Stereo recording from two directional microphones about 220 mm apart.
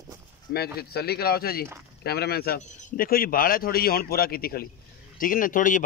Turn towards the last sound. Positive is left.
turn(degrees=35)  # may be behind; listen again after turning